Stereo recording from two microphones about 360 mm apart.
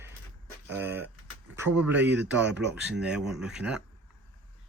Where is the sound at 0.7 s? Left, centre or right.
Centre.